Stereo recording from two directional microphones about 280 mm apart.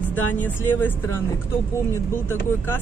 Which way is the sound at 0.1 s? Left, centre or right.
Centre.